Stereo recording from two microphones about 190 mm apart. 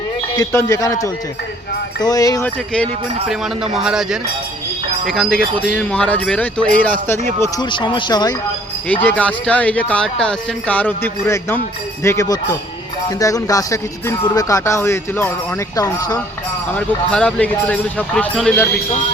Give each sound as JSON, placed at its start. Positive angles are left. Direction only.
{"t": 0.3, "sound": "speech", "side_deg": 15}
{"t": 2.7, "sound": "speech", "side_deg": 0}
{"t": 7.4, "sound": "speech", "side_deg": 25}
{"t": 8.9, "sound": "speech", "side_deg": 10}
{"t": 16.7, "sound": "speech", "side_deg": 5}